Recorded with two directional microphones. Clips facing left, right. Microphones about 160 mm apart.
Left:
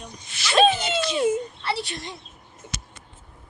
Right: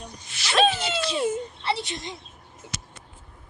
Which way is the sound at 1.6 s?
20° right (ahead or behind).